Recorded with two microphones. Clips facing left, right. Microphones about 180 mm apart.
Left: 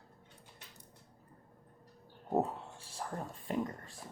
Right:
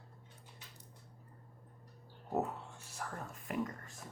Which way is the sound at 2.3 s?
30° left (ahead or behind).